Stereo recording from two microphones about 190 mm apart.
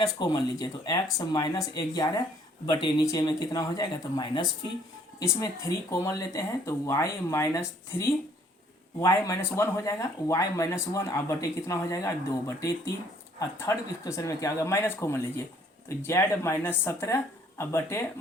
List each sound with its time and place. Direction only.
0.0 s speech: 20° left (ahead or behind)
9.0 s speech: 15° left (ahead or behind)